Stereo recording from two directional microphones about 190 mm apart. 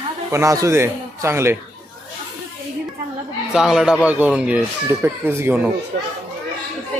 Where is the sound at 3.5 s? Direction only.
5° right (ahead or behind).